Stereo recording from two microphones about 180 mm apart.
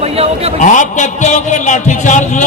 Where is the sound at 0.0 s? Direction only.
35° right (ahead or behind).